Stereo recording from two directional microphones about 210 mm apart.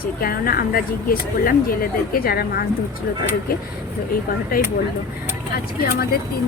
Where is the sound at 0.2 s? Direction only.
45° left (ahead or behind).